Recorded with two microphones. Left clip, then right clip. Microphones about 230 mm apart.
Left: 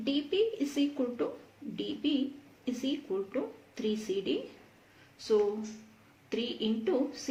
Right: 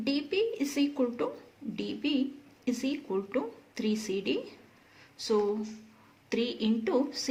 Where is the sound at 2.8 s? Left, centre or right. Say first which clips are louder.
Left 1 dB; right.